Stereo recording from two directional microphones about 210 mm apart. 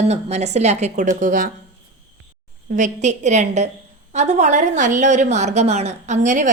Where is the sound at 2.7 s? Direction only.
35° right (ahead or behind).